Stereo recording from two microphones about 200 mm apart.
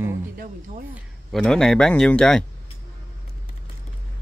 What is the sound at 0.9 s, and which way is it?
Speech, centre (ahead or behind).